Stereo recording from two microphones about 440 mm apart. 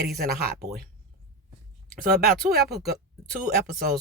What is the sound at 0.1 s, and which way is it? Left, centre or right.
Speech, right.